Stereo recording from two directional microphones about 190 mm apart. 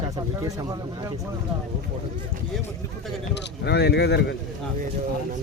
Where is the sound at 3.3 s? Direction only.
65° left (ahead or behind).